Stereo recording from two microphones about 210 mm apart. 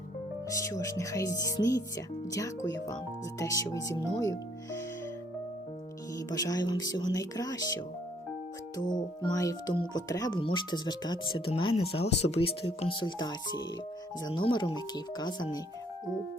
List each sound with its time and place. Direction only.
0.4 s speech: 15° left (ahead or behind)
6.1 s speech: 15° left (ahead or behind)
8.8 s speech: 20° left (ahead or behind)